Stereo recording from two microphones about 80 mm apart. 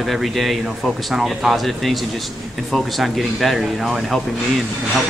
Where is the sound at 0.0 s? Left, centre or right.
Centre.